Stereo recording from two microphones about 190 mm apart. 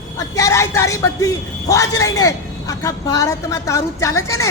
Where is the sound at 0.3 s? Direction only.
15° left (ahead or behind).